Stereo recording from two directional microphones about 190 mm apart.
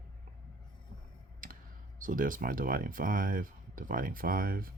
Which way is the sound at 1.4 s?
45° right (ahead or behind).